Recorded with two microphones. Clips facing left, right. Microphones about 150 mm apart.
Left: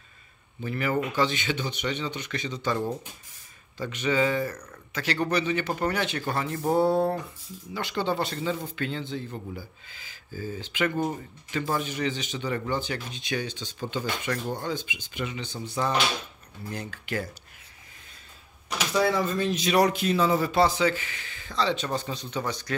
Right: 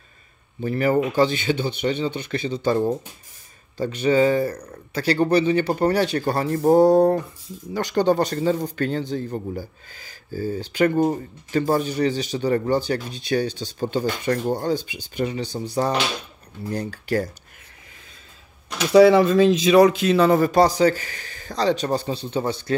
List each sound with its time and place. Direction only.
0.6 s speech: 40° right (ahead or behind)
18.9 s speech: 80° right
20.0 s speech: 80° right; by 22.8 s 30° right (ahead or behind)